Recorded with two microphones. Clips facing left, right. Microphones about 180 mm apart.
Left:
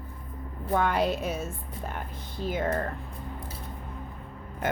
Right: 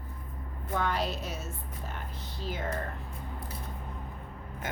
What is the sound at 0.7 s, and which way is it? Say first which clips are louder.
Speech: left 6 dB; 55° left (ahead or behind).